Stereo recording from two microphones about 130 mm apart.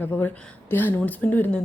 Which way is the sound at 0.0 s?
15° left (ahead or behind).